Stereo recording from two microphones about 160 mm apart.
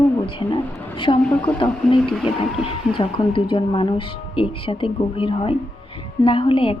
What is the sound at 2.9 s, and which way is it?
Speech, 30° left (ahead or behind).